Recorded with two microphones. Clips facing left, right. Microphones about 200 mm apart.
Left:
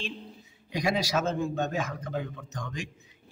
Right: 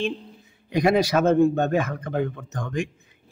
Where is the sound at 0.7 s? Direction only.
55° right (ahead or behind).